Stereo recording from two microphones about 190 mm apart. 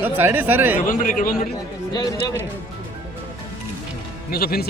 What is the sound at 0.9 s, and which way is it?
Speech, 45° left (ahead or behind).